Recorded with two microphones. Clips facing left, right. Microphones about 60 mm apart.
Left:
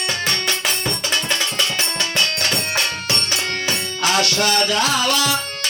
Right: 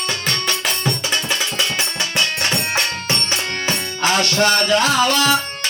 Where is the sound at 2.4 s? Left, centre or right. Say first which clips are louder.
Right 1 dB; right.